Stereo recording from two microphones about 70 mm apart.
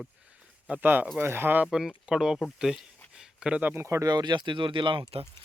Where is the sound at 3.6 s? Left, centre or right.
Right.